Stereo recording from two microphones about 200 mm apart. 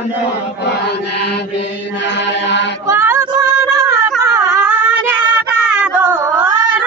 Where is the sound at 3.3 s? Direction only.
15° right (ahead or behind).